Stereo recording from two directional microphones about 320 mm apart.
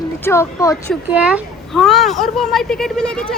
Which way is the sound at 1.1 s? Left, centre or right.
Centre.